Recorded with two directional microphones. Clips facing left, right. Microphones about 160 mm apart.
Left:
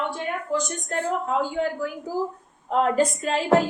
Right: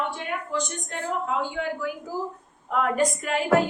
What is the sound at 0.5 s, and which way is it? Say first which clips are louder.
A woman's voice: left 6 dB; 40° left (ahead or behind).